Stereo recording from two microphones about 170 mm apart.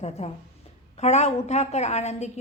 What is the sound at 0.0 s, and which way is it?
A woman's voice, 40° left (ahead or behind).